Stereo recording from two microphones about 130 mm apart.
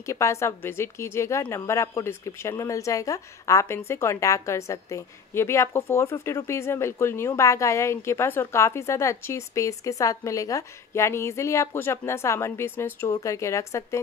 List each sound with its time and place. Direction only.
0.0 s a woman's voice: 20° left (ahead or behind)